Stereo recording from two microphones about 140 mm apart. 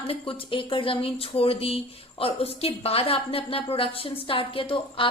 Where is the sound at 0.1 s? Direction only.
40° left (ahead or behind).